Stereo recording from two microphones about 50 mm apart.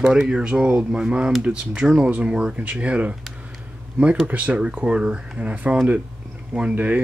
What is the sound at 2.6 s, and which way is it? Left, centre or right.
Speech, right.